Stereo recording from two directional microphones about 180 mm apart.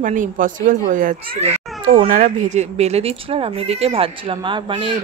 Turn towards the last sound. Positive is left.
turn(degrees=-25)  # may be behind; listen again after turning